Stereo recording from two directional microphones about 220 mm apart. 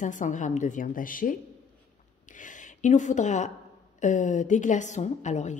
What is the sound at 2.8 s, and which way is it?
A woman's voice, 35° left (ahead or behind).